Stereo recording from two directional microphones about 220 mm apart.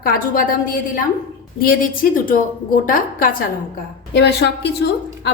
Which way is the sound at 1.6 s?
40° left (ahead or behind).